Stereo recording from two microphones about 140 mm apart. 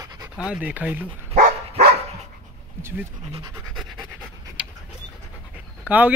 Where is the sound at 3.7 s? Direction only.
Centre (ahead or behind).